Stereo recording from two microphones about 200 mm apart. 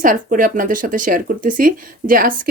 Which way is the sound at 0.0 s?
40° right (ahead or behind).